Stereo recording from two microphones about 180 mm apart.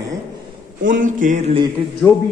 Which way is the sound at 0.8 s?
45° right (ahead or behind).